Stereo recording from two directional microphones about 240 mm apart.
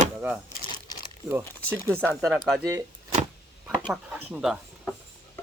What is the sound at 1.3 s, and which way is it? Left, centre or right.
Speech, centre.